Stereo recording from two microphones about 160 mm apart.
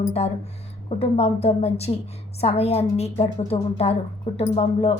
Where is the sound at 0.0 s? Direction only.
40° left (ahead or behind).